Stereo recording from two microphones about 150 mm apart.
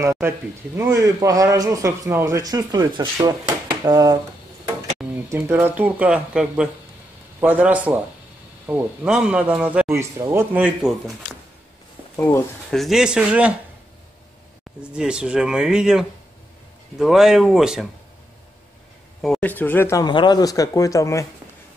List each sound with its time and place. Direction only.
0.0 s a man's voice: 20° right (ahead or behind)
12.2 s speech: 15° left (ahead or behind)
12.7 s speech: centre (ahead or behind)
14.8 s speech: 5° right (ahead or behind)
19.2 s speech: centre (ahead or behind)
19.5 s speech: 15° left (ahead or behind)
20.1 s speech: 30° left (ahead or behind)